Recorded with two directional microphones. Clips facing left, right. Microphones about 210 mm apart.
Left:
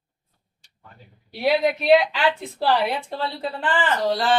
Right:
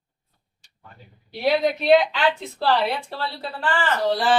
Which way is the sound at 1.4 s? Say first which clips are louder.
Even; 5° left (ahead or behind).